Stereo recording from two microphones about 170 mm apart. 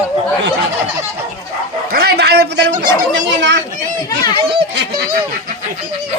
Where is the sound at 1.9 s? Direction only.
65° right (ahead or behind); by 2.6 s 85° right.